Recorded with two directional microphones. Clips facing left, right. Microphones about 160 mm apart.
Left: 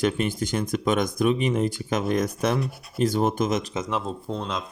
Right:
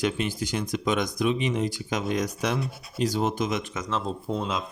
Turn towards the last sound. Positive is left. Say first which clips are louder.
# right 1 dB
turn(degrees=-5)  # may be behind; listen again after turning